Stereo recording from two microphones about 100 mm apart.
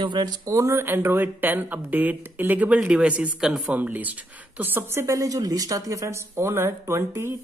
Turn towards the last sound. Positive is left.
turn(degrees=-25)  # may be behind; listen again after turning